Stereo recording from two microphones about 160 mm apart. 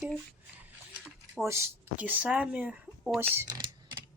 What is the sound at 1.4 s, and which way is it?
Speech, 15° right (ahead or behind).